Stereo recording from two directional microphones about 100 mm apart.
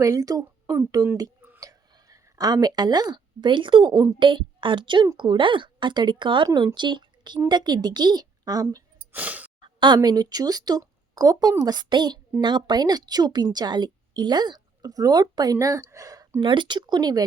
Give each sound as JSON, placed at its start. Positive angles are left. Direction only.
{"t": 0.0, "sound": "a woman's voice", "side_deg": -35}
{"t": 9.1, "sound": "speech", "side_deg": -15}
{"t": 9.6, "sound": "a woman's voice", "side_deg": -55}
{"t": 16.4, "sound": "a woman's voice", "side_deg": -55}